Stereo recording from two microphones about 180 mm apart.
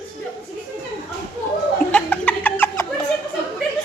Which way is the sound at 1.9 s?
5° left (ahead or behind).